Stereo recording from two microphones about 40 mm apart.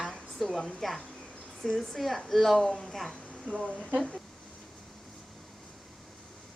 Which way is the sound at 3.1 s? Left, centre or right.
Left.